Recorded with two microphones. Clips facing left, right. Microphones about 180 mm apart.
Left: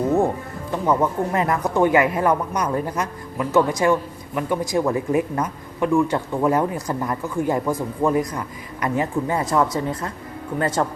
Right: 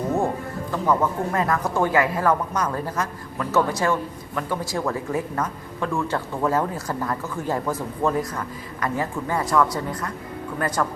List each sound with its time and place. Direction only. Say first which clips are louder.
0.7 s speech: left 2 dB; 20° left (ahead or behind)